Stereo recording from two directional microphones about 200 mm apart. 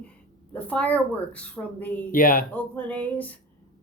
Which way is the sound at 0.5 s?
5° left (ahead or behind).